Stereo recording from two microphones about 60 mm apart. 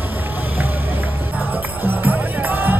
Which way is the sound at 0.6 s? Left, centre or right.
Right.